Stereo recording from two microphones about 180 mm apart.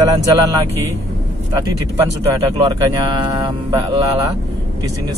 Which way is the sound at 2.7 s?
25° right (ahead or behind).